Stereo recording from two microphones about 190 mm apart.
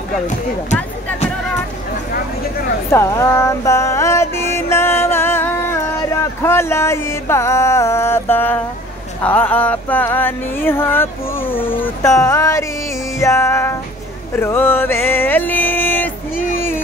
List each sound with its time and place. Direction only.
2.9 s music: 15° left (ahead or behind)